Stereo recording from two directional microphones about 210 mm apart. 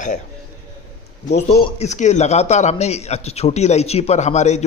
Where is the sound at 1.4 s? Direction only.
30° left (ahead or behind).